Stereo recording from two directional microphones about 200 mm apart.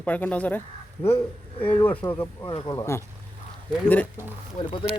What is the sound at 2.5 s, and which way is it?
Speech, 25° left (ahead or behind).